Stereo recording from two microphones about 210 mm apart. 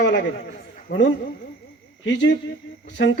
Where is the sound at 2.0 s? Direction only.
60° left (ahead or behind).